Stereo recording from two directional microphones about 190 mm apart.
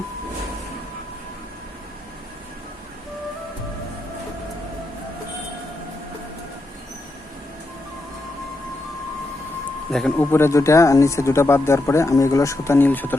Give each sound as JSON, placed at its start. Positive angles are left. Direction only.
{"t": 9.9, "sound": "speech", "side_deg": 0}
{"t": 10.3, "sound": "speech", "side_deg": 15}